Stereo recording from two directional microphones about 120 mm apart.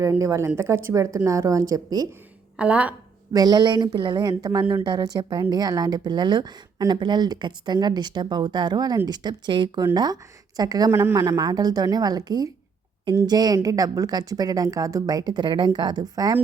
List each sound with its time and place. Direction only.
0.0 s a woman's voice: 25° right (ahead or behind)
2.6 s a woman's voice: 10° right (ahead or behind)
3.3 s speech: 35° right (ahead or behind)